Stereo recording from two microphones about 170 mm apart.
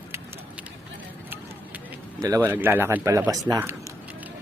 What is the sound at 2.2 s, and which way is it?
Speech, 20° right (ahead or behind).